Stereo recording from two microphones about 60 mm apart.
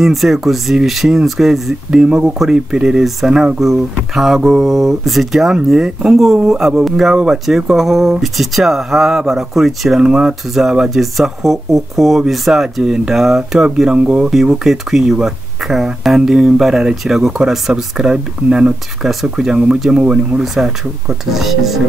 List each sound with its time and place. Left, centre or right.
0.0 s speech: centre